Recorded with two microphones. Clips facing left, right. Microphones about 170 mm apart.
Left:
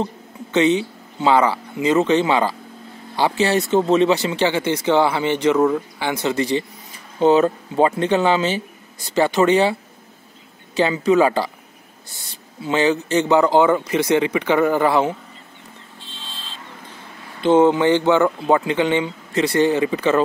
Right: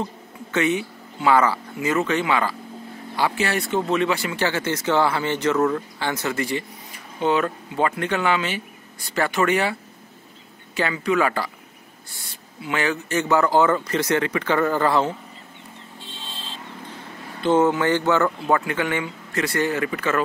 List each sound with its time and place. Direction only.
0.5 s speech: 25° left (ahead or behind)
10.8 s speech: 25° left (ahead or behind)
12.6 s speech: 25° left (ahead or behind)
17.4 s speech: 20° left (ahead or behind)